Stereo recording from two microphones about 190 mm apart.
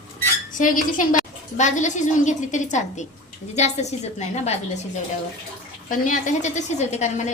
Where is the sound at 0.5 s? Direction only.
45° left (ahead or behind).